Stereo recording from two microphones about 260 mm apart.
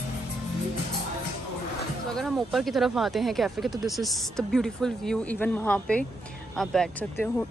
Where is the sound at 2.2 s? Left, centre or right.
Centre.